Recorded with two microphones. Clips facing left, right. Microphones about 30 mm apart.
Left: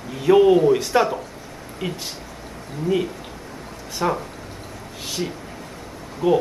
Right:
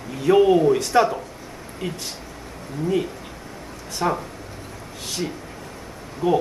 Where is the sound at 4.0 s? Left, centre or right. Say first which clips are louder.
Even; centre.